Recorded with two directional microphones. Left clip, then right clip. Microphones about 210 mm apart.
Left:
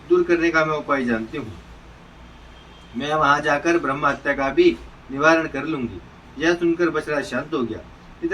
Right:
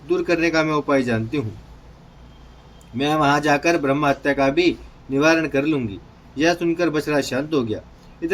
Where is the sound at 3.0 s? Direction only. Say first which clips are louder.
Even; 60° right (ahead or behind).